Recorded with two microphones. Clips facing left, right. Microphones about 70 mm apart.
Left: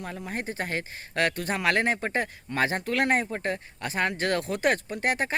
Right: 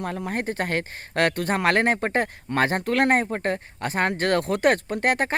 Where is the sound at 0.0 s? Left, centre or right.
Right.